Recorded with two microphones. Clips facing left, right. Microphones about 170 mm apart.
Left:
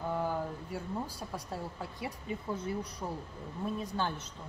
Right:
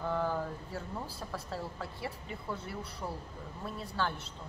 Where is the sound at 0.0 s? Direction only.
15° left (ahead or behind).